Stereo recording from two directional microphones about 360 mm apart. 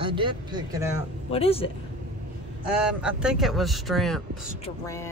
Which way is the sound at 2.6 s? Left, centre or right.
Centre.